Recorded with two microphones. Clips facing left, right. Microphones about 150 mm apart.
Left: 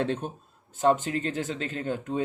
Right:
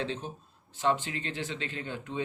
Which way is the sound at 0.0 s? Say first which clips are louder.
Left 6 dB; 55° left (ahead or behind).